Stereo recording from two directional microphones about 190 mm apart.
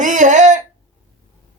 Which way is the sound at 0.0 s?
40° right (ahead or behind).